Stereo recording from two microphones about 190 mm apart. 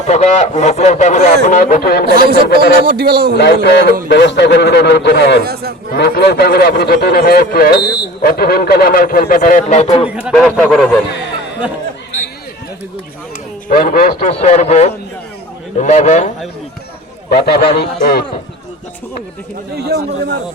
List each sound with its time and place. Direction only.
0.1 s a man's voice: 35° left (ahead or behind); by 2.7 s 55° left (ahead or behind)
2.8 s a man's voice: 55° right (ahead or behind)
3.3 s speech: 60° left (ahead or behind)
5.4 s speech: 55° right (ahead or behind)
5.9 s speech: 55° left (ahead or behind); by 10.1 s 35° left (ahead or behind)
10.1 s a man's voice: 5° right (ahead or behind)
13.7 s a man's voice: 50° left (ahead or behind)
17.2 s speech: 55° left (ahead or behind)
19.7 s a man's voice: 55° right (ahead or behind)